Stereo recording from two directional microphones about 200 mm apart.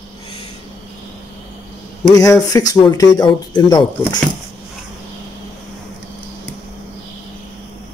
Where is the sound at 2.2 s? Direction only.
15° left (ahead or behind).